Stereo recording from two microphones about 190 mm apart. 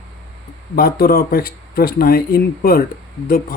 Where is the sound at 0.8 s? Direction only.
50° left (ahead or behind).